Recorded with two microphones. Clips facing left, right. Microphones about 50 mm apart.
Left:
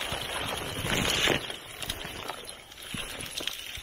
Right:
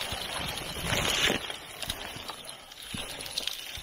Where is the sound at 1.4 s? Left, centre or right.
Centre.